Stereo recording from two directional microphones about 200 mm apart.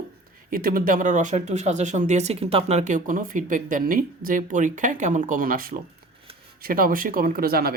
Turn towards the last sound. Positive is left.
turn(degrees=-50)  # may be behind; listen again after turning